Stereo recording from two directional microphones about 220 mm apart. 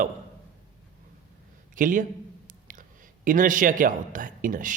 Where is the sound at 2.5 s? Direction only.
35° right (ahead or behind).